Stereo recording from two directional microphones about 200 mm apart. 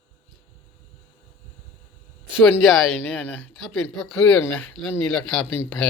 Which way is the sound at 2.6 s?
Centre (ahead or behind).